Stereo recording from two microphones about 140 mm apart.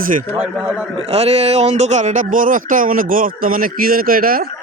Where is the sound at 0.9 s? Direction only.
45° right (ahead or behind); by 4.4 s 90° right.